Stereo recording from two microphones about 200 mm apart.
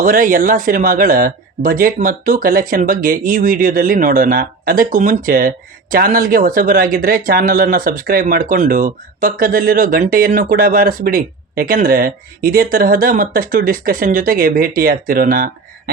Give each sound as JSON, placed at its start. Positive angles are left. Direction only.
{"t": 0.0, "sound": "speech", "side_deg": -40}